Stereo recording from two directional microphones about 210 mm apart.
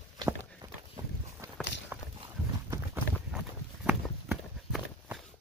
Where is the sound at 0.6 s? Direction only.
20° right (ahead or behind).